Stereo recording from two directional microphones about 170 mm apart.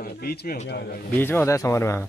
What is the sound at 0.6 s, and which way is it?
Speech, 70° left (ahead or behind).